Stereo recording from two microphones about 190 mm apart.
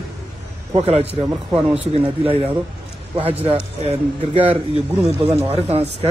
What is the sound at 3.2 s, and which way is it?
A man's voice, 30° right (ahead or behind).